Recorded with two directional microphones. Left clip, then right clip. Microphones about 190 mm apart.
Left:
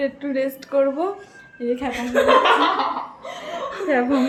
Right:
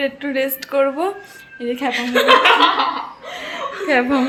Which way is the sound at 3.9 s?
5° right (ahead or behind).